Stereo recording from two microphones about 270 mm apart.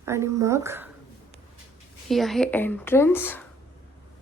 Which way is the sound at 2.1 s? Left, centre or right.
Centre.